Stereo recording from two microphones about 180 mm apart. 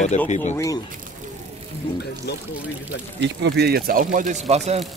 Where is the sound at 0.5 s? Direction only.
20° left (ahead or behind).